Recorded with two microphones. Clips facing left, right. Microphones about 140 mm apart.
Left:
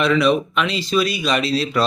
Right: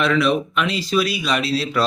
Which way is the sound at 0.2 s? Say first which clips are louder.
Left 2 dB; 5° right (ahead or behind).